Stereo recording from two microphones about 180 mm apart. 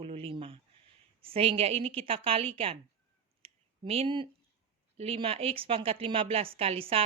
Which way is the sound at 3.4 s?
35° right (ahead or behind).